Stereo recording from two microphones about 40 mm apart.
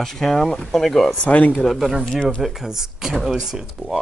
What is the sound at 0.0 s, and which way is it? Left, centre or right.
Speech, centre.